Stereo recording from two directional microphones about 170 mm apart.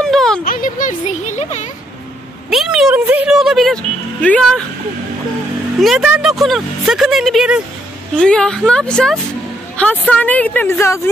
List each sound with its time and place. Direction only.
0.0 s a sound: 5° left (ahead or behind)
0.5 s speech: 55° left (ahead or behind)
2.5 s speech: 5° right (ahead or behind)
5.8 s a woman's voice: centre (ahead or behind); by 11.0 s 15° left (ahead or behind)